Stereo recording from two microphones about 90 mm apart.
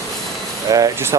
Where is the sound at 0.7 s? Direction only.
40° right (ahead or behind).